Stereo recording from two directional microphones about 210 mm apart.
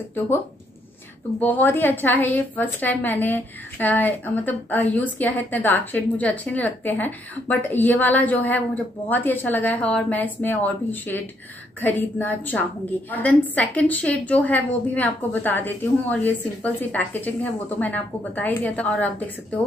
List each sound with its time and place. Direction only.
1.4 s a woman's voice: 10° left (ahead or behind)